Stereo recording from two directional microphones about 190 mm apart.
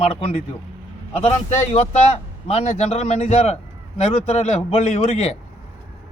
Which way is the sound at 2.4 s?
35° left (ahead or behind).